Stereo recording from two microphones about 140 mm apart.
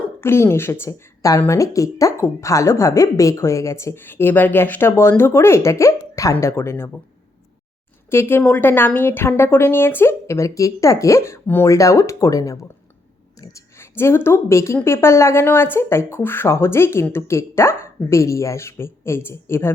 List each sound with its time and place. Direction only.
0.0 s a woman's voice: 15° left (ahead or behind)
8.1 s a woman's voice: 15° left (ahead or behind)
13.4 s a sound: 20° left (ahead or behind)
14.3 s a woman's voice: 20° left (ahead or behind)